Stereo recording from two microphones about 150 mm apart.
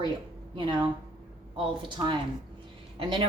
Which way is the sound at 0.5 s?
30° right (ahead or behind).